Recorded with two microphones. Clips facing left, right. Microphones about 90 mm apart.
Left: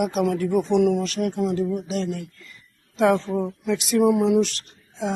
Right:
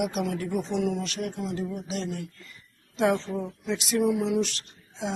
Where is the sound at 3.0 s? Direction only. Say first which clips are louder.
Left 5 dB; 55° left (ahead or behind).